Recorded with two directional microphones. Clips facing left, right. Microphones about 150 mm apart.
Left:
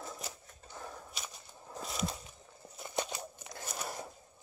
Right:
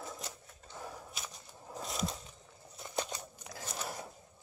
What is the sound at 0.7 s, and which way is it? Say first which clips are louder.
Walk: right 1 dB; 5° right (ahead or behind).